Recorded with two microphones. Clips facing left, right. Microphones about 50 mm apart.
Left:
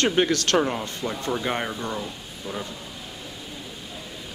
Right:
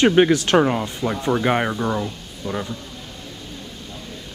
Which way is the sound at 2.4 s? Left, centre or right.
Centre.